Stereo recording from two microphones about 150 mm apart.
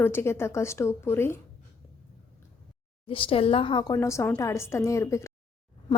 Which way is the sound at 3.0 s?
35° left (ahead or behind).